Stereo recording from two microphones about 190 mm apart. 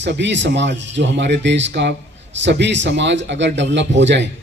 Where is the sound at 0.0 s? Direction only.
70° right (ahead or behind).